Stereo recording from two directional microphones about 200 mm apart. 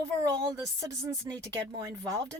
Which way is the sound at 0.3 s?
15° right (ahead or behind).